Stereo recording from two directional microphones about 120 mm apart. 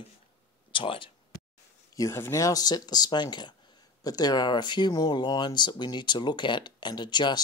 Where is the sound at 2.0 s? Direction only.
25° left (ahead or behind).